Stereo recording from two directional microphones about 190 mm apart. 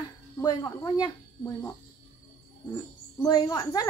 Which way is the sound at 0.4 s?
20° left (ahead or behind).